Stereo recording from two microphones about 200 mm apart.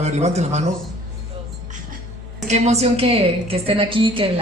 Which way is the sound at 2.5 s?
35° right (ahead or behind).